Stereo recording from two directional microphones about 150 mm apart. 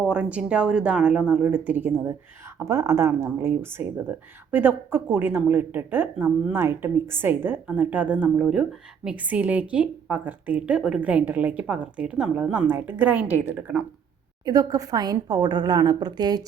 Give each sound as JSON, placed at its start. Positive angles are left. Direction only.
{"t": 0.0, "sound": "a woman's voice", "side_deg": -10}
{"t": 14.4, "sound": "a woman's voice", "side_deg": -25}